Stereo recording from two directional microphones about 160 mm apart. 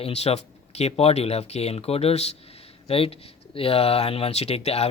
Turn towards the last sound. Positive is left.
turn(degrees=40)  # may be behind; listen again after turning